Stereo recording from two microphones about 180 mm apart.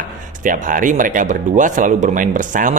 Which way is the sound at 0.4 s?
50° right (ahead or behind).